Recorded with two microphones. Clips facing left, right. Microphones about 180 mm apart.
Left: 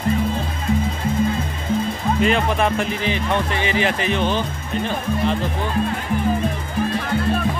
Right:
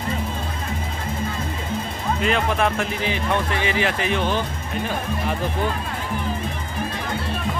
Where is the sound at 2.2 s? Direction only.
Centre (ahead or behind).